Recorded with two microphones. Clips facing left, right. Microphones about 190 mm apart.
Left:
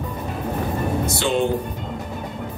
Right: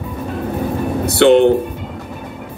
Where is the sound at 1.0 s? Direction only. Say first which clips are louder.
Right 14 dB; 65° right (ahead or behind).